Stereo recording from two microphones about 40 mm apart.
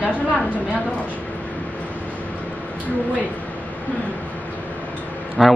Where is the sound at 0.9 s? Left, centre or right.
Left.